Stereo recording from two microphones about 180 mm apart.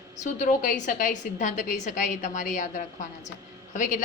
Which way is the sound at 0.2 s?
45° left (ahead or behind).